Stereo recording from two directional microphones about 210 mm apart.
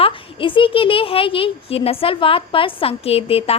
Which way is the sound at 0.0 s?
25° left (ahead or behind).